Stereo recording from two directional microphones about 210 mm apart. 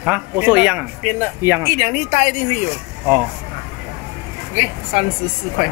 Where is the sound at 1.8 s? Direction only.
35° left (ahead or behind).